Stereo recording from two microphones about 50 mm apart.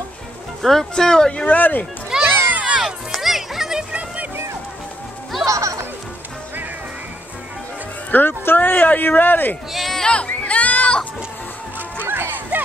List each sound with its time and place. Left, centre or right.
0.6 s speech: centre; by 1.6 s left
1.6 s speech: left
2.2 s a sound: right
2.6 s crowd: centre
3.1 s music: centre
5.4 s speech: right
8.1 s speech: left
9.7 s music: centre
10.0 s music: left
12.0 s music: right